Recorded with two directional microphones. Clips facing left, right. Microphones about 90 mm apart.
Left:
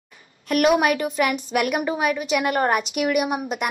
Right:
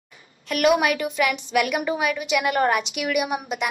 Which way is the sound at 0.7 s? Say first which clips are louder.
Left 2 dB; 35° left (ahead or behind).